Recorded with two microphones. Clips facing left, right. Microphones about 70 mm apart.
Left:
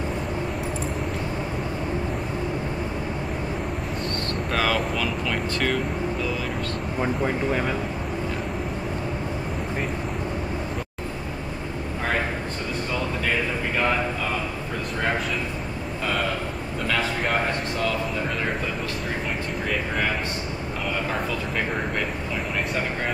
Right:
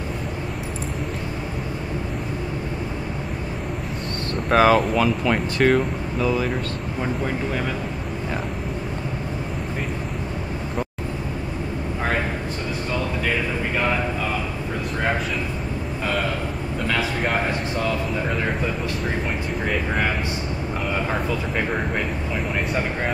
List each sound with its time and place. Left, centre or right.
4.5 s speech: right
7.0 s speech: centre
16.9 s a sound: centre